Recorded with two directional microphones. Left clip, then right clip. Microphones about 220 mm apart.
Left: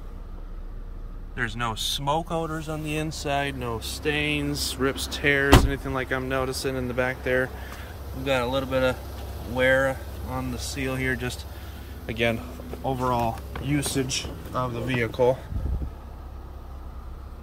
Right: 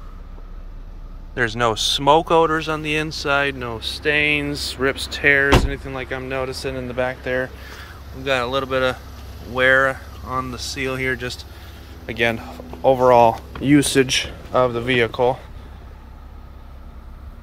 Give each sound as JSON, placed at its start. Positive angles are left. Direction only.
{"t": 1.3, "sound": "speech", "side_deg": -20}
{"t": 2.8, "sound": "speech", "side_deg": 0}
{"t": 13.1, "sound": "speech", "side_deg": -15}
{"t": 14.5, "sound": "speech", "side_deg": -45}
{"t": 15.0, "sound": "speech", "side_deg": 5}